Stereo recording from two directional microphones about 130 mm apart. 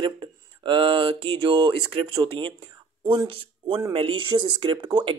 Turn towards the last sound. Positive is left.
turn(degrees=-35)  # may be behind; listen again after turning